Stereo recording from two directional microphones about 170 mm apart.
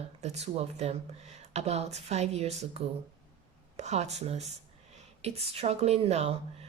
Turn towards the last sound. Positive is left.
turn(degrees=-35)  # may be behind; listen again after turning